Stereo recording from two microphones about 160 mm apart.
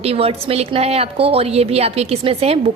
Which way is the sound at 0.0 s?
40° right (ahead or behind).